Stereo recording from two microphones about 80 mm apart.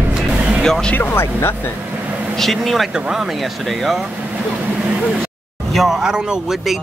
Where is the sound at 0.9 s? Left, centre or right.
Left.